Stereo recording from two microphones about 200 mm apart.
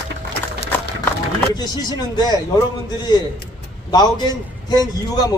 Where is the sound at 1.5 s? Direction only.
20° left (ahead or behind).